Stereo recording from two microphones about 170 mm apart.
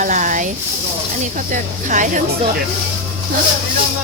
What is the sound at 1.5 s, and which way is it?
Speech, 50° right (ahead or behind).